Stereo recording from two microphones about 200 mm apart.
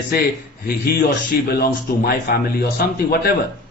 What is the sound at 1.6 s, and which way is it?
Speech, 50° left (ahead or behind).